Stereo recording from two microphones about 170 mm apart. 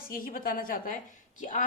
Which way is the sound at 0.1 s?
55° left (ahead or behind).